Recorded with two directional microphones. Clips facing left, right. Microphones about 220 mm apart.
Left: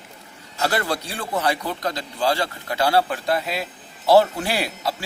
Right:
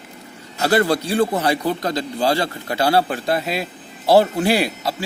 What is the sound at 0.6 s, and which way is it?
A man's voice, 35° right (ahead or behind).